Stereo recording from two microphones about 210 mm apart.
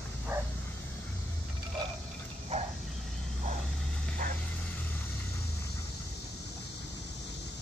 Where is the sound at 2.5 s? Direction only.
30° right (ahead or behind).